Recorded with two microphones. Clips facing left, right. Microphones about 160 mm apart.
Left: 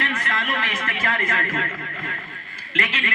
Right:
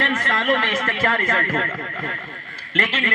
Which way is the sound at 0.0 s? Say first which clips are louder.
Right 5 dB; 45° right (ahead or behind).